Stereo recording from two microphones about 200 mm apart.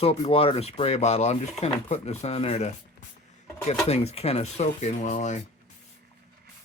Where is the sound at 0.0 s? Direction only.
30° left (ahead or behind).